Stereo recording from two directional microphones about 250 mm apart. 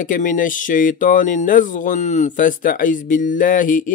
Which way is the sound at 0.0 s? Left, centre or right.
Left.